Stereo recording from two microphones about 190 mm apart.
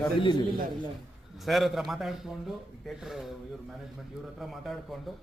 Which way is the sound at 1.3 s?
Centre (ahead or behind).